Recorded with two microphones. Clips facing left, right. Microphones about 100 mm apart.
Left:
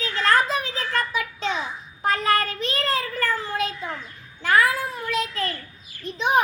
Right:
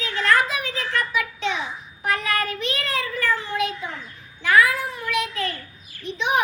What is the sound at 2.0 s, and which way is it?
Child singing, 35° left (ahead or behind).